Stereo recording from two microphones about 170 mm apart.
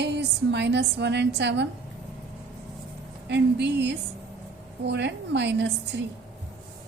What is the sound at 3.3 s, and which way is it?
A woman's voice, 90° right.